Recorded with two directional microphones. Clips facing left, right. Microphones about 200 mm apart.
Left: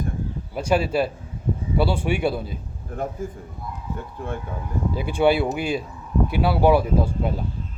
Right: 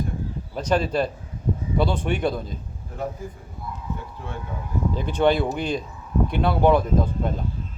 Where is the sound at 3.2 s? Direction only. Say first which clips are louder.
Left 4 dB; 50° left (ahead or behind).